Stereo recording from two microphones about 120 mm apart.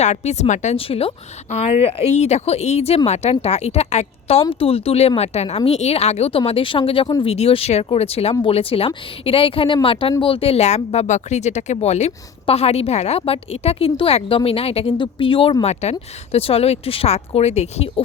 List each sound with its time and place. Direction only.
0.0 s a woman's voice: 70° left (ahead or behind)
0.8 s speech: 50° left (ahead or behind)
4.4 s speech: 50° left (ahead or behind)
14.9 s speech: 45° left (ahead or behind)
15.6 s speech: 65° left (ahead or behind)